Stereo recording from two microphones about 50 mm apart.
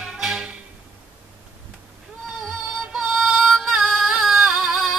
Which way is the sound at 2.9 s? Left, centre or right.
Centre.